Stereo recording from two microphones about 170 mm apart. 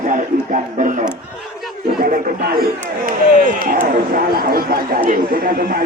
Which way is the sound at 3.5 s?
60° right (ahead or behind).